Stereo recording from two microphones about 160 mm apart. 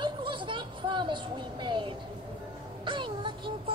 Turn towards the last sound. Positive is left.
turn(degrees=-30)  # may be behind; listen again after turning